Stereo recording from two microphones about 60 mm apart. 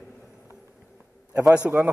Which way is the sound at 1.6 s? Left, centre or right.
Centre.